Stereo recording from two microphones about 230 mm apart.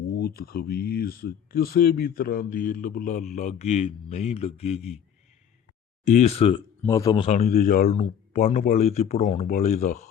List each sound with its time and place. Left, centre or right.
0.2 s speech: left
6.1 s speech: left
6.8 s speech: centre
7.3 s speech: left